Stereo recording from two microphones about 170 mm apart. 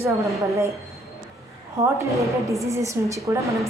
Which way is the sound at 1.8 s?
15° right (ahead or behind).